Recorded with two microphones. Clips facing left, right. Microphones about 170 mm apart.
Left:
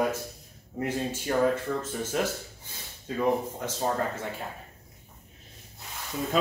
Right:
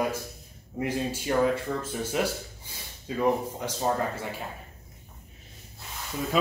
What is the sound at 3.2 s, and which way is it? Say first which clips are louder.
Speech: right 1 dB; 10° right (ahead or behind).